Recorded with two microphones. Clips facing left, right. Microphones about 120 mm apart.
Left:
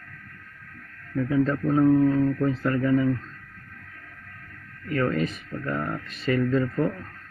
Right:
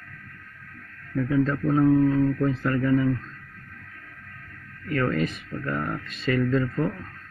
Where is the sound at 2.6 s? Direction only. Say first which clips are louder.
Even; 20° left (ahead or behind).